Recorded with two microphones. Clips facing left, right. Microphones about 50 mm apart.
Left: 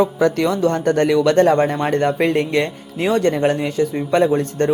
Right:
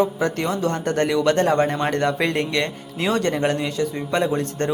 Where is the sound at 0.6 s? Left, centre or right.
Left.